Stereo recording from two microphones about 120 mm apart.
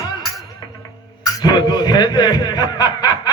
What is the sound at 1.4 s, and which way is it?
Speech, 35° left (ahead or behind).